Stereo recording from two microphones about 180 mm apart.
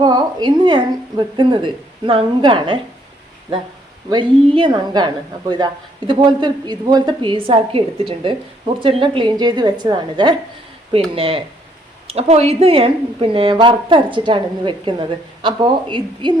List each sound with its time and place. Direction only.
0.0 s a woman's voice: 25° right (ahead or behind)
4.1 s a woman's voice: 25° right (ahead or behind)